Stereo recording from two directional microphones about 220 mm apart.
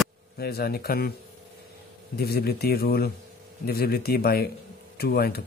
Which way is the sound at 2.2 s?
45° left (ahead or behind).